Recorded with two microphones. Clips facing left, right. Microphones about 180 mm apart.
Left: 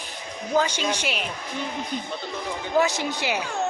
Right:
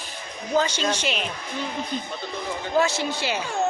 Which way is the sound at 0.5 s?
10° left (ahead or behind).